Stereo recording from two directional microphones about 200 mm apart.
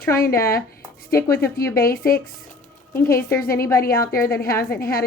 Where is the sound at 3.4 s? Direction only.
50° left (ahead or behind).